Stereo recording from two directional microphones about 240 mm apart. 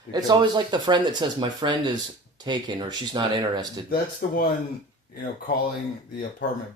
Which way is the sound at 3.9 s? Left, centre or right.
Left.